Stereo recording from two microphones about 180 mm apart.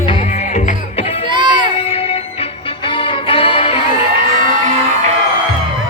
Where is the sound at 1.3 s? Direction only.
25° right (ahead or behind).